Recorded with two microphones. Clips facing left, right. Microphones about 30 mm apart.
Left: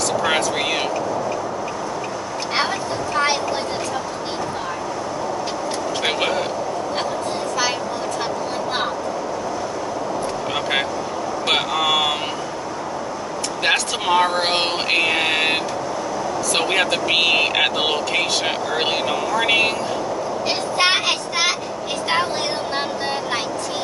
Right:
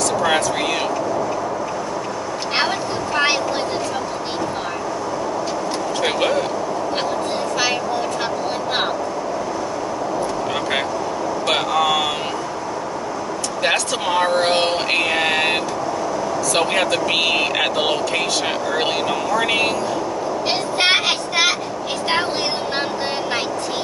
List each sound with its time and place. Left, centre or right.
0.2 s speech: centre
6.0 s speech: centre
11.4 s speech: centre
13.6 s speech: centre
20.8 s child singing: centre